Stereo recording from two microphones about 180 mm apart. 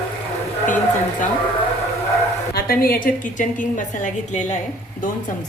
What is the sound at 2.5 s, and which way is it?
A woman's voice, 55° left (ahead or behind).